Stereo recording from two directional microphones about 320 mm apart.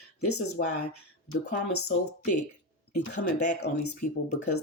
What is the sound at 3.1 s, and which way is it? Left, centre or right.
Speech, left.